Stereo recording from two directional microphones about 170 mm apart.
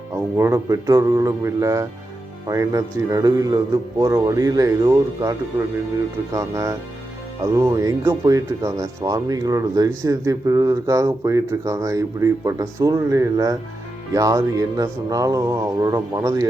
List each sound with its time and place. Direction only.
0.1 s speech: 15° right (ahead or behind)
6.3 s speech: 20° right (ahead or behind)